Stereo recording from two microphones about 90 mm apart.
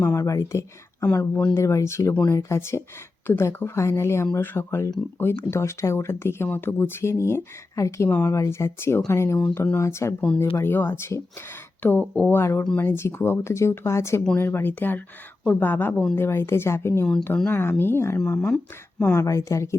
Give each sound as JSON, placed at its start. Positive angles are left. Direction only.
{"t": 0.0, "sound": "speech", "side_deg": 35}
{"t": 10.2, "sound": "speech", "side_deg": 20}
{"t": 18.5, "sound": "speech", "side_deg": 10}
{"t": 19.1, "sound": "speech", "side_deg": 35}